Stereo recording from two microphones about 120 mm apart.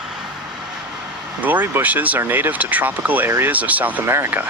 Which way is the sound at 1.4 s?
15° right (ahead or behind).